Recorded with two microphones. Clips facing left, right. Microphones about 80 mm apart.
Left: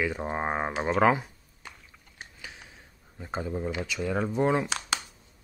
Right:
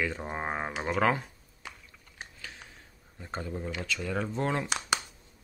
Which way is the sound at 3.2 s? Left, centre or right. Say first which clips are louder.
Left 4 dB; centre.